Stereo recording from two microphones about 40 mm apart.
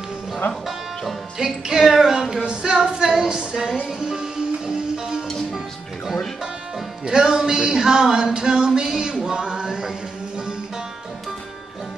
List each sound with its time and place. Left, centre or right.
0.7 s music: centre
2.4 s music: right
7.1 s a sound: centre